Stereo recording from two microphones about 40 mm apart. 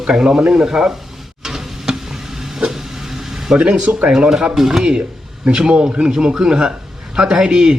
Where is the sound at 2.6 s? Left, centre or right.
Centre.